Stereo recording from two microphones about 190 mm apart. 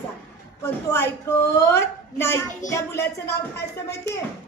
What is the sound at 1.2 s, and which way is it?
A woman's voice, 15° left (ahead or behind).